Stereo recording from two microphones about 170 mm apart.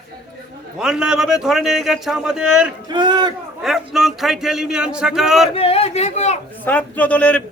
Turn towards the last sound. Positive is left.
turn(degrees=10)  # may be behind; listen again after turning